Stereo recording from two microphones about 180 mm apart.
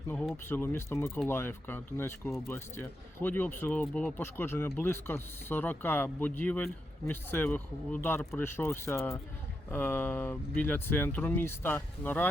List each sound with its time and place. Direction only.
0.1 s speech: 10° left (ahead or behind)